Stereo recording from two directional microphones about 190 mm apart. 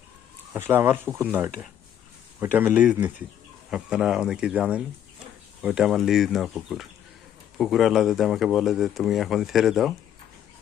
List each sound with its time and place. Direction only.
0.5 s speech: 10° right (ahead or behind)